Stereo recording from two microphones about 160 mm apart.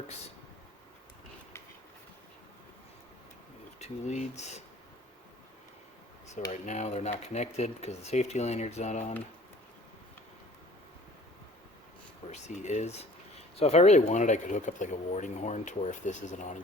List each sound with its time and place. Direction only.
3.8 s speech: 45° left (ahead or behind)
6.3 s speech: 45° left (ahead or behind)
12.3 s speech: 45° left (ahead or behind)